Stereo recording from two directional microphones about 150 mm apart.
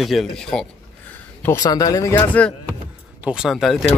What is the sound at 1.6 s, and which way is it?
Speech, 25° left (ahead or behind).